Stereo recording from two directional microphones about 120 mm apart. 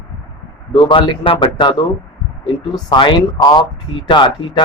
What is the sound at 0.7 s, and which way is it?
Speech, 40° left (ahead or behind).